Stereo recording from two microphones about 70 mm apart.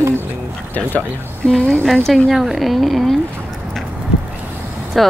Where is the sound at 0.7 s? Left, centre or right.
Left.